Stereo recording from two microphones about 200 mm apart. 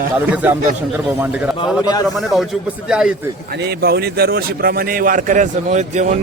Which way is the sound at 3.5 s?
55° right (ahead or behind).